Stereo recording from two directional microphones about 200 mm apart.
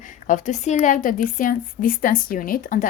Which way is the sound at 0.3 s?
40° left (ahead or behind).